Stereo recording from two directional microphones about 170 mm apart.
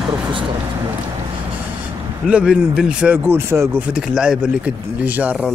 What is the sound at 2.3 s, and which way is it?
Speech, 5° right (ahead or behind).